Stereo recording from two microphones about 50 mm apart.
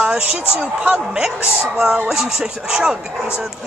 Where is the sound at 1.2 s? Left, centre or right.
Centre.